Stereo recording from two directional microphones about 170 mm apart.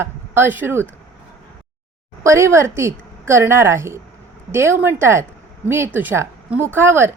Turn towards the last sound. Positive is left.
turn(degrees=-15)  # may be behind; listen again after turning